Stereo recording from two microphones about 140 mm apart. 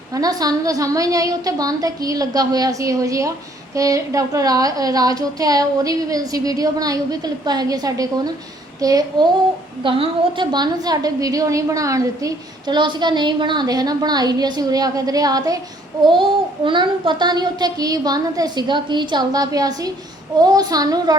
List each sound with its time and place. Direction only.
0.1 s a woman's voice: 25° right (ahead or behind)
9.8 s a woman's voice: 40° right (ahead or behind)
16.6 s a woman's voice: 35° right (ahead or behind)